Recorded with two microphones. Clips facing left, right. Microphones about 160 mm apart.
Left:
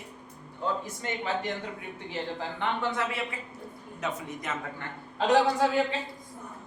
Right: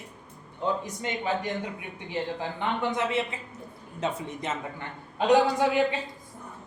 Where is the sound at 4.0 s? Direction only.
30° right (ahead or behind).